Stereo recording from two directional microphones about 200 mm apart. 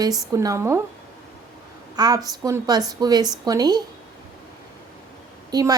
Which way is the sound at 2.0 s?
20° right (ahead or behind).